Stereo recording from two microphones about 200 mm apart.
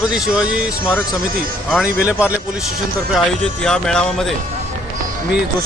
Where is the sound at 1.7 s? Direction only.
5° right (ahead or behind).